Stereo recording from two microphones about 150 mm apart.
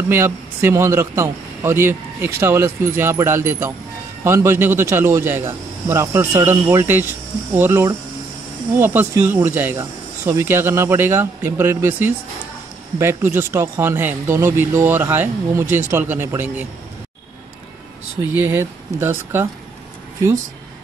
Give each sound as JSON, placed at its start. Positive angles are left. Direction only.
{"t": 0.1, "sound": "a man's voice", "side_deg": -15}
{"t": 18.2, "sound": "a man's voice", "side_deg": -15}